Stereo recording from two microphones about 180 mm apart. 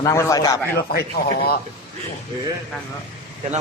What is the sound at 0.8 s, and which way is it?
Speech, 60° left (ahead or behind).